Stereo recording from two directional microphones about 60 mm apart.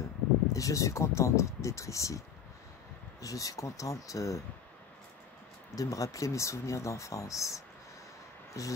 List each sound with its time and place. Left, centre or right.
0.5 s speech: left
3.2 s speech: left
5.8 s speech: left